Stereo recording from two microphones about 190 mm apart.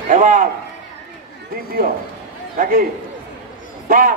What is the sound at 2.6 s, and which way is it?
Speech, 45° right (ahead or behind).